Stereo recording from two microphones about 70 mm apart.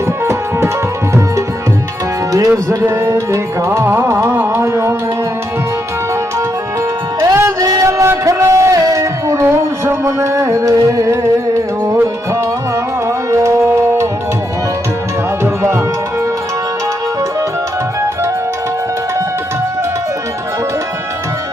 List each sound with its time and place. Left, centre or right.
2.5 s music: right
7.2 s music: right
7.6 s a sound: right
13.1 s tabla: right